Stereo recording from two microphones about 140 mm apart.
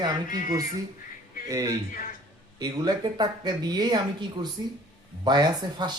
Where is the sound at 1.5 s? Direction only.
25° right (ahead or behind).